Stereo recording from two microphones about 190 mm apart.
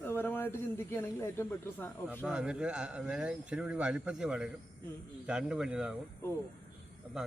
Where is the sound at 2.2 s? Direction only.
5° right (ahead or behind).